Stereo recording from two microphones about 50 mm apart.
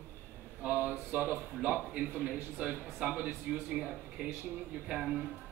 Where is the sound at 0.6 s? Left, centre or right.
Right.